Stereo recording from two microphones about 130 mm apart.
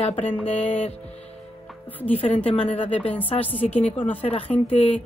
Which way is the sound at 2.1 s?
50° left (ahead or behind).